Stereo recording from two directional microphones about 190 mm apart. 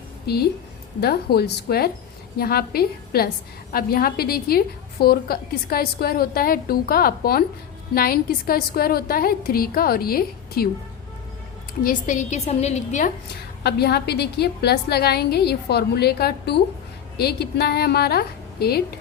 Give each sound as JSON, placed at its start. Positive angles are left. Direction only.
{"t": 0.3, "sound": "a woman's voice", "side_deg": 55}
{"t": 11.8, "sound": "a woman's voice", "side_deg": 45}
{"t": 13.2, "sound": "a woman's voice", "side_deg": 55}